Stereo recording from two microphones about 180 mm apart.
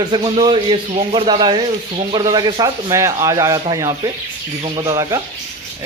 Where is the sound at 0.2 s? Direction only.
30° right (ahead or behind).